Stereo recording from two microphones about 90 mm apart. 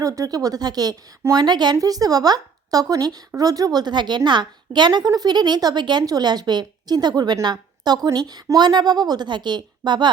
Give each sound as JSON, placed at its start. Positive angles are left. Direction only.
{"t": 0.0, "sound": "a woman's voice", "side_deg": -40}